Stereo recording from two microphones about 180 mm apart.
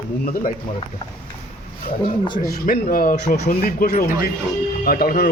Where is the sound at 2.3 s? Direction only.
50° left (ahead or behind).